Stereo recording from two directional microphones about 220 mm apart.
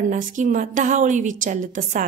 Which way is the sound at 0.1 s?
35° right (ahead or behind).